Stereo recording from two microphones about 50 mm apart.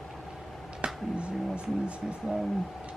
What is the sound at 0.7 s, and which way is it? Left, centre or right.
Speech, right.